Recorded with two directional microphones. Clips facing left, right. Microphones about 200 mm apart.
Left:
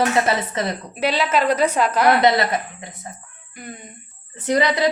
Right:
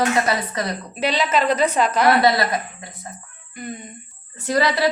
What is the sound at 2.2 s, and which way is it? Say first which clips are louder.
Speech: left 1 dB; 20° left (ahead or behind).